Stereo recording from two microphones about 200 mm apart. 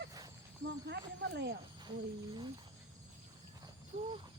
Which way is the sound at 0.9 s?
60° right (ahead or behind).